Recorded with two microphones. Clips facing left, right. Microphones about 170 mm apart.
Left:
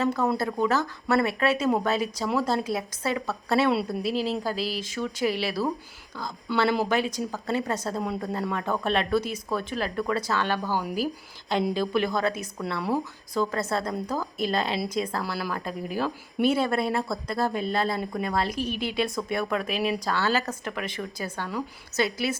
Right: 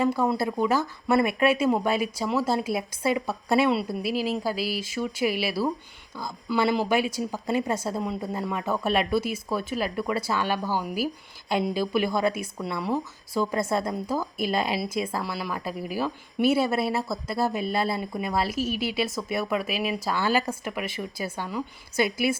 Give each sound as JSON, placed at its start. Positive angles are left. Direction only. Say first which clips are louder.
{"t": 0.0, "sound": "speech", "louder": "right 1 dB", "side_deg": -10}
{"t": 3.7, "sound": "speech", "louder": "even", "side_deg": 0}